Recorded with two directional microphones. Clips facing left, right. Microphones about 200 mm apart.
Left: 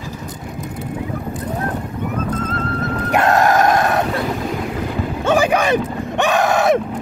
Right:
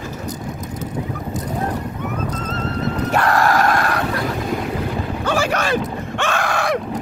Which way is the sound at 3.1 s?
20° left (ahead or behind).